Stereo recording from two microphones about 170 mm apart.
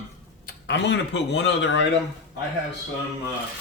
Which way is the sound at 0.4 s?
90° left.